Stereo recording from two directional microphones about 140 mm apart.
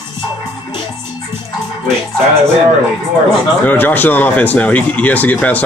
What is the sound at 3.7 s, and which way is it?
Speech, 15° left (ahead or behind).